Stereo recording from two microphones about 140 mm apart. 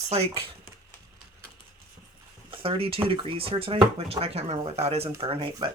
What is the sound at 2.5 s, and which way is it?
Speech, 40° right (ahead or behind).